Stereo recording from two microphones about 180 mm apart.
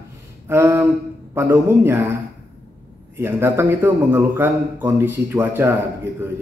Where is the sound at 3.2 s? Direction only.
15° right (ahead or behind).